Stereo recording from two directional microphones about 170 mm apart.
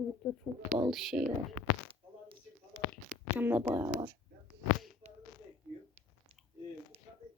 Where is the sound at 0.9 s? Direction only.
Centre (ahead or behind).